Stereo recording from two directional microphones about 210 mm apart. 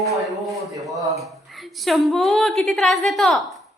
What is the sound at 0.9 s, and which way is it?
Speech, 15° right (ahead or behind).